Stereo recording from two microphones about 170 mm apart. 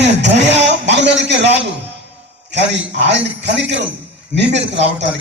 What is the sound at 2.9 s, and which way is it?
A man's voice, 90° right.